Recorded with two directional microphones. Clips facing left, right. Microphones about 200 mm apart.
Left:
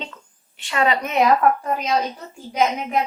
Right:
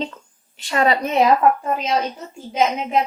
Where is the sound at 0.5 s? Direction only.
40° right (ahead or behind).